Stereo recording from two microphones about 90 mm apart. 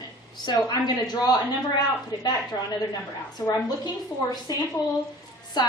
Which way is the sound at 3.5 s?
45° left (ahead or behind).